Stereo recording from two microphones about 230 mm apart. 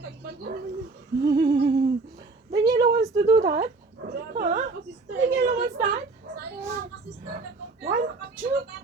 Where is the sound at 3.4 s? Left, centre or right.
Right.